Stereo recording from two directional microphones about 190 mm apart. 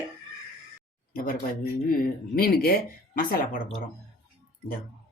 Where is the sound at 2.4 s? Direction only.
55° left (ahead or behind).